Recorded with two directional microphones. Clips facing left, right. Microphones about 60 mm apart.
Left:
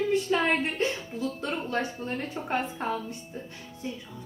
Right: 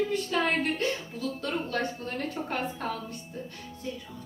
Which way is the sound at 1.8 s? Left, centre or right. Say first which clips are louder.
Left 1 dB; centre.